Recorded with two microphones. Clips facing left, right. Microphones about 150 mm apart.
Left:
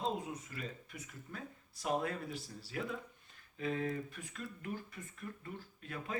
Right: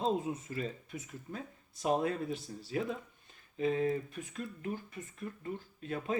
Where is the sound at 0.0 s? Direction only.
25° right (ahead or behind).